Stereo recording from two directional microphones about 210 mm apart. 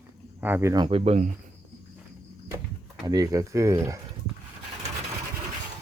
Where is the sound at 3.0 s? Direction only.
15° right (ahead or behind).